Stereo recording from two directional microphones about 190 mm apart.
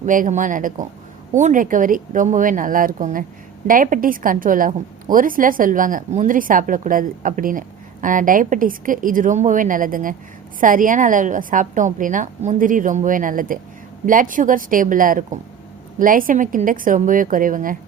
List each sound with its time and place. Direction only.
0.0 s a woman's voice: 40° right (ahead or behind)